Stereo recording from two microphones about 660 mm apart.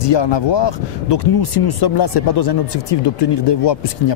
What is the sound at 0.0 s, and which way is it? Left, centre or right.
Speech, left.